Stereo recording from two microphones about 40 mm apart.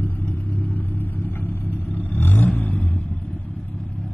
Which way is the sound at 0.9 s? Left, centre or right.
Left.